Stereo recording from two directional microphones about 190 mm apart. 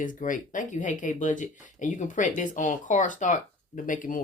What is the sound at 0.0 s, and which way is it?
Speech, 45° left (ahead or behind).